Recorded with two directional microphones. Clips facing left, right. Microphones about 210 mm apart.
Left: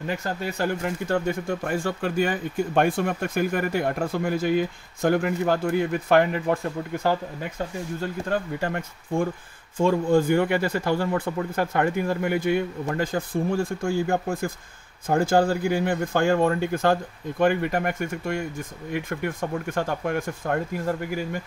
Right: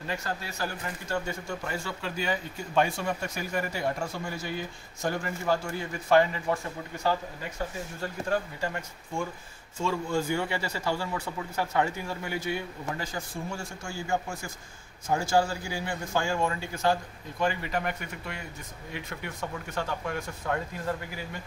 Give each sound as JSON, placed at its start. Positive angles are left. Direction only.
{"t": 0.5, "sound": "speech", "side_deg": 55}
{"t": 8.5, "sound": "speech", "side_deg": 60}